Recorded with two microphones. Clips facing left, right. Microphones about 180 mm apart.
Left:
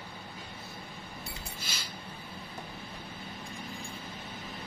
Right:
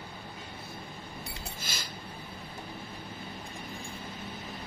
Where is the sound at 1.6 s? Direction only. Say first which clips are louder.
Right 2 dB; 45° right (ahead or behind).